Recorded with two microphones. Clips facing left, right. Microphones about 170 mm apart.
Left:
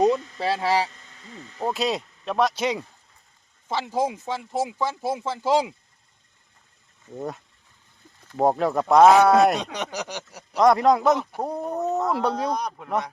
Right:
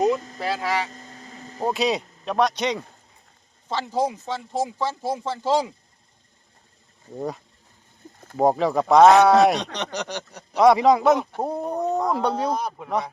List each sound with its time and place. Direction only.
0.3 s speech: 30° left (ahead or behind)
0.9 s a sound: 40° right (ahead or behind)
1.7 s speech: centre (ahead or behind)
8.4 s speech: centre (ahead or behind)